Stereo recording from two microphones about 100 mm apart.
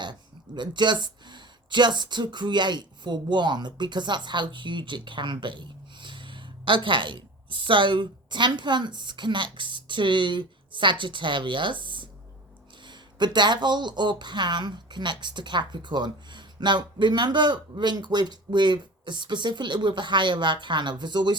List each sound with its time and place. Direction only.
0.0 s speech: 50° right (ahead or behind)